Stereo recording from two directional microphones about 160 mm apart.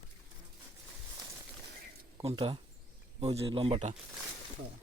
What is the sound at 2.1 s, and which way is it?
Speech, 35° right (ahead or behind).